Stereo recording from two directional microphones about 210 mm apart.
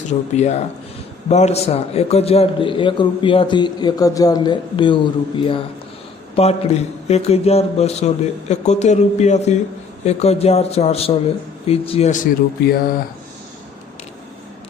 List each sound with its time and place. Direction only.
0.1 s a man's voice: 30° left (ahead or behind)